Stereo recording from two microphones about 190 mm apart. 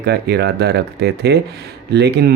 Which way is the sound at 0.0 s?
60° right (ahead or behind).